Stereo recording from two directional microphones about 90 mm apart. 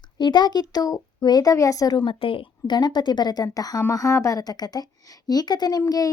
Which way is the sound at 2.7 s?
50° left (ahead or behind).